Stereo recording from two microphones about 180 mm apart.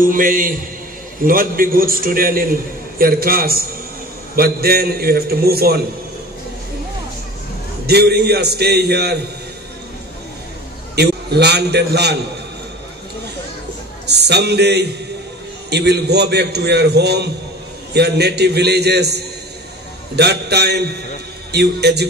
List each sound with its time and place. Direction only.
0.0 s a man's voice: 50° right (ahead or behind)
7.8 s a man's voice: 65° right (ahead or behind)
11.0 s a man's voice: 70° right (ahead or behind)
14.0 s a man's voice: 70° right (ahead or behind)